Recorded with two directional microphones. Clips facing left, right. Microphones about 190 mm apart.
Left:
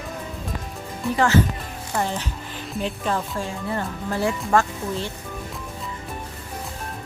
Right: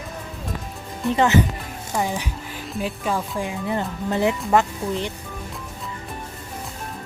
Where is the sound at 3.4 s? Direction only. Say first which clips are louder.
Right 2 dB; 20° right (ahead or behind).